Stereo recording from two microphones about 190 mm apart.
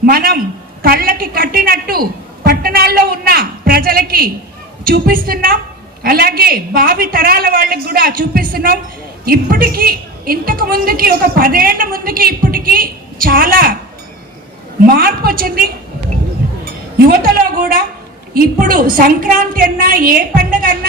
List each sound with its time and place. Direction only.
0.0 s a sound: 50° right (ahead or behind)
4.9 s a woman's voice: 50° right (ahead or behind)
14.8 s a woman's voice: 50° right (ahead or behind)
17.1 s a woman's voice: 50° right (ahead or behind)